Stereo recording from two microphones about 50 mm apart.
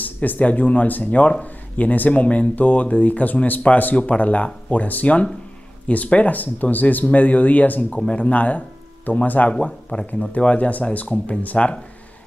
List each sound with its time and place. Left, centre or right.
0.0 s speech: left